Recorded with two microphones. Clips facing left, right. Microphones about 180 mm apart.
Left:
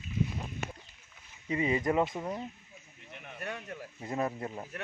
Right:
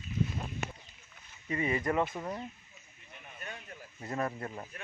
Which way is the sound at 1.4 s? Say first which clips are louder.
Left 2 dB; 20° left (ahead or behind).